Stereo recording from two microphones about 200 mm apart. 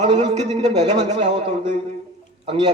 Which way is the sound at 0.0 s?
35° right (ahead or behind).